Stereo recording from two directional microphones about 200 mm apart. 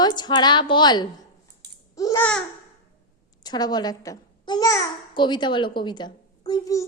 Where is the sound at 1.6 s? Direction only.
55° right (ahead or behind).